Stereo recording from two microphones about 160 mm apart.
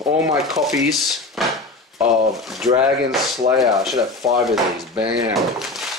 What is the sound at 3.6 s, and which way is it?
Speech, centre (ahead or behind).